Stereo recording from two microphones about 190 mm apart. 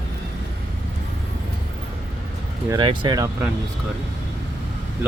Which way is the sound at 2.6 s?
25° right (ahead or behind).